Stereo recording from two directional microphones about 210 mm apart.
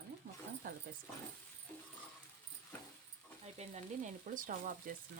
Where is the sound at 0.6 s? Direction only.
40° right (ahead or behind).